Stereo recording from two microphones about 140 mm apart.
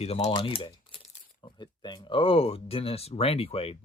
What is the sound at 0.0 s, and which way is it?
Speech, 45° left (ahead or behind).